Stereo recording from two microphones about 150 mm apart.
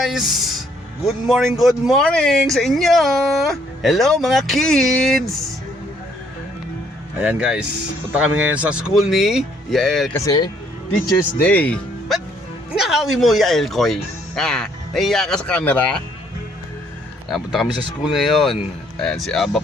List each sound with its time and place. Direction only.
0.0 s a man's voice: centre (ahead or behind)
7.2 s a man's voice: 10° right (ahead or behind)
10.2 s speech: 25° left (ahead or behind)
11.4 s speech: 10° left (ahead or behind)
17.2 s a man's voice: centre (ahead or behind)